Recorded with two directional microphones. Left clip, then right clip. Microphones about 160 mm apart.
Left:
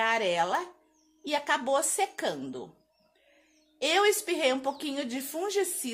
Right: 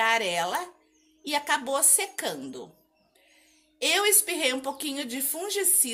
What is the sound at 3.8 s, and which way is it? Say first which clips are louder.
A woman's voice: right 1 dB; 40° left (ahead or behind).